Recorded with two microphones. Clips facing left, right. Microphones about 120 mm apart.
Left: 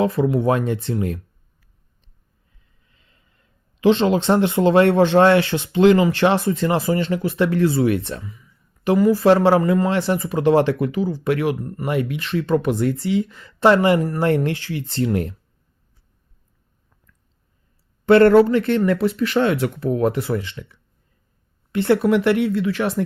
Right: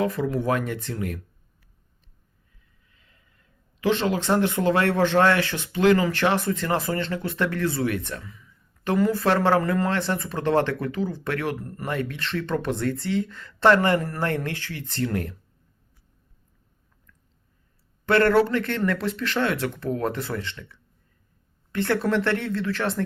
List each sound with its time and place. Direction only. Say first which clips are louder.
0.0 s speech: left 6 dB; 20° left (ahead or behind)
2.9 s speech: left 1 dB; 25° left (ahead or behind)
18.0 s speech: left 7 dB; 20° left (ahead or behind)